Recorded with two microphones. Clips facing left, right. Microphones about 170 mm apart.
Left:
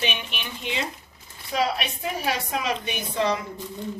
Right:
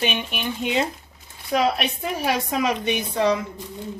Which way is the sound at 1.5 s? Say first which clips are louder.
Right 4 dB; 55° right (ahead or behind).